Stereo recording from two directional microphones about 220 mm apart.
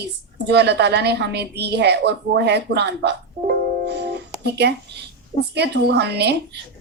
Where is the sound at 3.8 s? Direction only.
50° right (ahead or behind).